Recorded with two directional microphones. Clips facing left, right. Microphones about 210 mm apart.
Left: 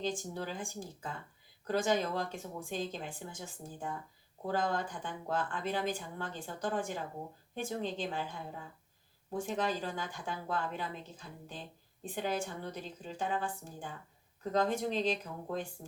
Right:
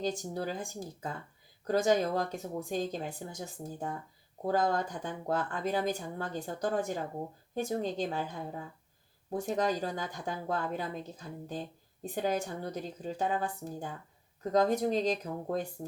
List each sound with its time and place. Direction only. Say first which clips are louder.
0.0 s speech: right 3 dB; 40° right (ahead or behind)